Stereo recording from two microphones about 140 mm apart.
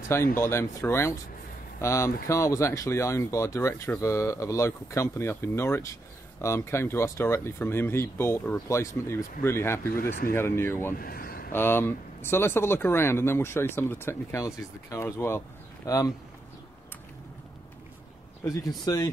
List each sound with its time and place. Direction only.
0.4 s speech: 20° left (ahead or behind)
11.0 s speech: 90° left
11.5 s speech: 15° left (ahead or behind)
18.4 s speech: 25° left (ahead or behind)